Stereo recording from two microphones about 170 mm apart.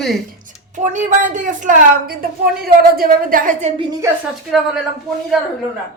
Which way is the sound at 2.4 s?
65° right (ahead or behind).